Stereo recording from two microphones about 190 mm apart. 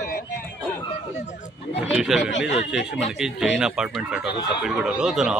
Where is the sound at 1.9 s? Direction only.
5° right (ahead or behind).